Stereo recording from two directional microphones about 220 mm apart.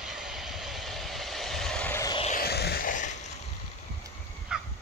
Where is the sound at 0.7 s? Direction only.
Centre (ahead or behind).